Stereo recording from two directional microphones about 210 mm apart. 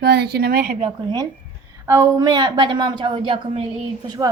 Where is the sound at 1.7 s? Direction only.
15° right (ahead or behind).